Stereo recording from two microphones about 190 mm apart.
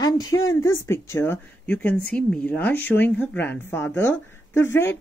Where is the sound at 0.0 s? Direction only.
20° left (ahead or behind).